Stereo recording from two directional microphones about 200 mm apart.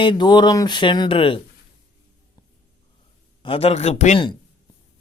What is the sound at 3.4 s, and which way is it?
Speech, 30° left (ahead or behind).